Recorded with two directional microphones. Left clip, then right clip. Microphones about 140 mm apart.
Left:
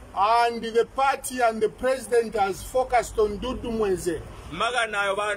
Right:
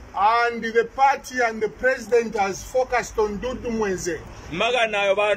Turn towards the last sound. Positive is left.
turn(degrees=-20)  # may be behind; listen again after turning